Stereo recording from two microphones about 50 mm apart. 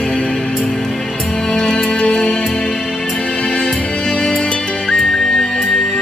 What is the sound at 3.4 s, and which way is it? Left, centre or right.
Music, centre.